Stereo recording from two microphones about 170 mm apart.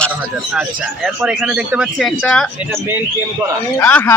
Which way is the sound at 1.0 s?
5° right (ahead or behind).